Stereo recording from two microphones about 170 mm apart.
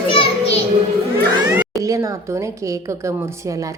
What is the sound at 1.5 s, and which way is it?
A woman's voice, 20° right (ahead or behind).